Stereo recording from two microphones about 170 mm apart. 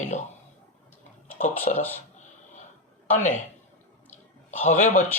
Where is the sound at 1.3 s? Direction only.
45° left (ahead or behind).